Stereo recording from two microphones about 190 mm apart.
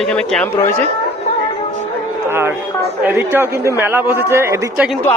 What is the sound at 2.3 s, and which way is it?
A man's voice, 10° right (ahead or behind).